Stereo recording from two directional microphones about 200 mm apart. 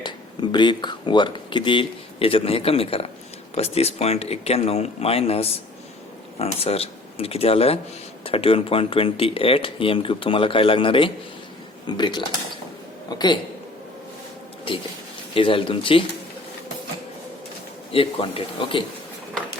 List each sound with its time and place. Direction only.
0.0 s speech: 25° left (ahead or behind)
15.4 s speech: 25° left (ahead or behind)
17.9 s speech: 25° left (ahead or behind)